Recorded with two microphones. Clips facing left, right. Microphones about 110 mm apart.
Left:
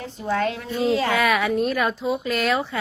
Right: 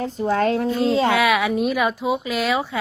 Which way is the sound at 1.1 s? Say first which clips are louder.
Right 2 dB; centre (ahead or behind).